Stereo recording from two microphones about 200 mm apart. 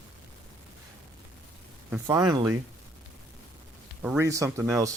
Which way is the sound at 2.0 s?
20° right (ahead or behind).